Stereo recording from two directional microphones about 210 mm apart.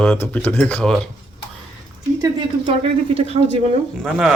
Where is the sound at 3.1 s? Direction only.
30° right (ahead or behind).